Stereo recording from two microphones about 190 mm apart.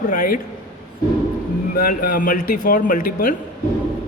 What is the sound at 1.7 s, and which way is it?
A man's voice, 50° left (ahead or behind).